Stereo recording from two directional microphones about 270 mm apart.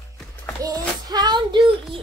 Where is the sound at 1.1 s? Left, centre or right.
Centre.